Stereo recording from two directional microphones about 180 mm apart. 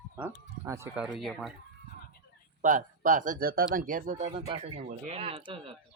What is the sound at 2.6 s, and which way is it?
Speech, 45° right (ahead or behind).